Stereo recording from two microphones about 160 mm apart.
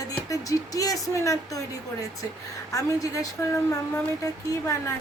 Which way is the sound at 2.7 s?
20° left (ahead or behind).